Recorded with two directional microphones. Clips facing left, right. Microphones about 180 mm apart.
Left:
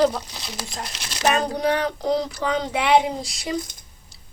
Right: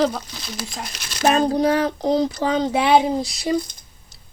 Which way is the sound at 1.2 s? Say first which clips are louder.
Right 4 dB; 30° right (ahead or behind).